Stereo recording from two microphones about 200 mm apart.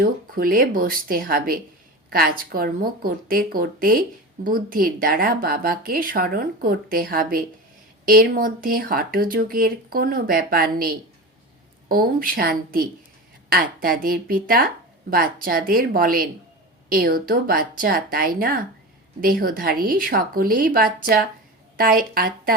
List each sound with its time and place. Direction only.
0.0 s speech: 45° right (ahead or behind)